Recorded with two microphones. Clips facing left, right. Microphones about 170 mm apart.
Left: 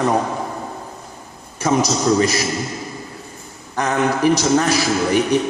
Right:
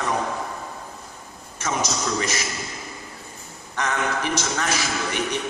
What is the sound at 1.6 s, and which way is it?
Speech, 35° left (ahead or behind).